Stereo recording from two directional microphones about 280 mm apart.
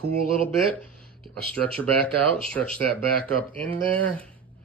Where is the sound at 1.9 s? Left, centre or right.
Right.